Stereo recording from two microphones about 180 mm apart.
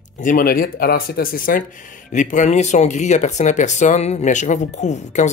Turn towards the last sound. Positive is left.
turn(degrees=40)  # may be behind; listen again after turning